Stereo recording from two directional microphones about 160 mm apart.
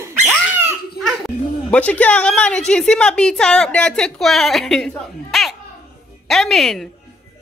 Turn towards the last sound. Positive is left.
turn(degrees=0)  # may be behind; listen again after turning